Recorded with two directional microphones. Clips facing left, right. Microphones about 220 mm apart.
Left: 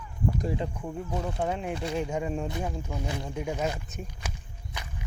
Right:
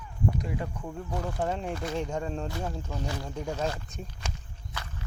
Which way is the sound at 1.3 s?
5° left (ahead or behind).